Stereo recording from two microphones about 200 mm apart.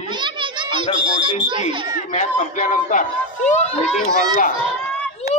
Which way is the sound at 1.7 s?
25° right (ahead or behind).